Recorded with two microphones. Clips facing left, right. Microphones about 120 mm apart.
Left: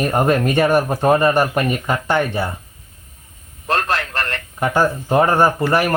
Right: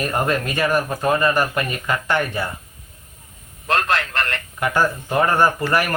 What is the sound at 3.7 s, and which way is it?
A man's voice, 35° left (ahead or behind).